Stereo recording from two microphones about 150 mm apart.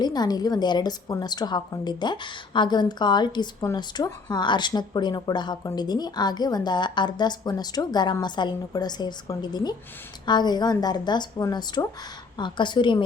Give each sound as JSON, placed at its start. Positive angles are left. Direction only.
{"t": 0.0, "sound": "a woman's voice", "side_deg": 25}